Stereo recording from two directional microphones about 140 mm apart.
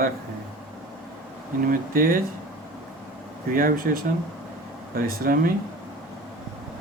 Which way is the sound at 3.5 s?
90° right.